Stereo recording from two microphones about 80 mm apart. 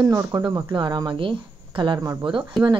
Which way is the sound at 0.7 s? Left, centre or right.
Right.